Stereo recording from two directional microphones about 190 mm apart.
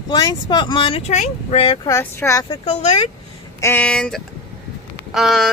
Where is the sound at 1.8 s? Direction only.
15° left (ahead or behind).